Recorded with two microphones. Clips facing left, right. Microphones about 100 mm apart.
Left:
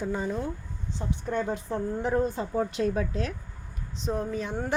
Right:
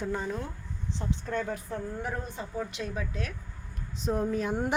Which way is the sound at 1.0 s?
20° left (ahead or behind).